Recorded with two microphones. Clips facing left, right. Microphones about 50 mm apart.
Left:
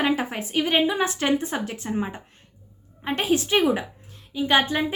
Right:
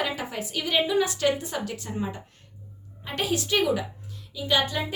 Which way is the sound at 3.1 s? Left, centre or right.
Left.